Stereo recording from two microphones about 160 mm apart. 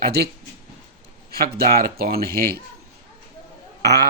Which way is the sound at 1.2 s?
70° right (ahead or behind).